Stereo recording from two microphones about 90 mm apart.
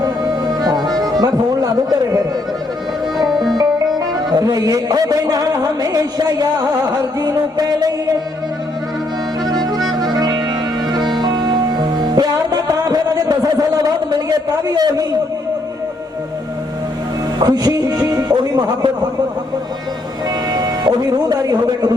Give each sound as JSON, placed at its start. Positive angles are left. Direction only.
{"t": 0.6, "sound": "music", "side_deg": -50}
{"t": 3.2, "sound": "music", "side_deg": 0}
{"t": 4.3, "sound": "music", "side_deg": -45}
{"t": 10.0, "sound": "music", "side_deg": -45}
{"t": 17.4, "sound": "music", "side_deg": -45}
{"t": 20.5, "sound": "a man's voice", "side_deg": -50}